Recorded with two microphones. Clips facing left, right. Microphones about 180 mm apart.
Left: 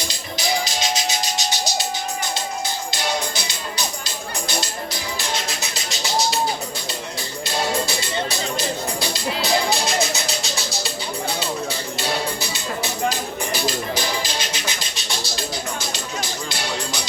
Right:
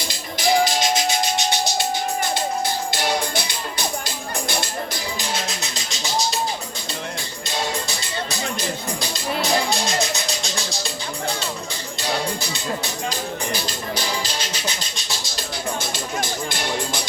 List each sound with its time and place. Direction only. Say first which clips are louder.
0.3 s music: right 6 dB; 50° right (ahead or behind)
2.9 s music: right 2 dB; 55° right (ahead or behind)
9.4 s music: left 1 dB; centre (ahead or behind)
15.9 s music: right 2 dB; 50° right (ahead or behind)